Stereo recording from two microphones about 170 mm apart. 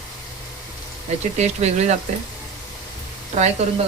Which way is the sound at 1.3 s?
40° right (ahead or behind).